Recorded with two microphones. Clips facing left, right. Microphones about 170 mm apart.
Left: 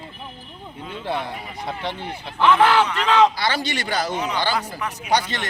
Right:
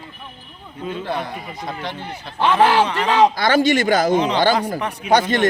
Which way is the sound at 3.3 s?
50° right (ahead or behind).